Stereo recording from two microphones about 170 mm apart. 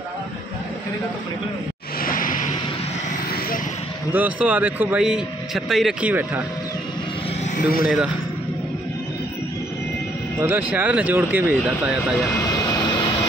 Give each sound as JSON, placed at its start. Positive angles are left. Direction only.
{"t": 2.0, "sound": "music", "side_deg": 55}
{"t": 4.1, "sound": "a man's voice", "side_deg": -10}
{"t": 7.8, "sound": "speech", "side_deg": -5}
{"t": 10.4, "sound": "a man's voice", "side_deg": -10}
{"t": 11.6, "sound": "speech", "side_deg": 0}
{"t": 12.4, "sound": "vehicle", "side_deg": 25}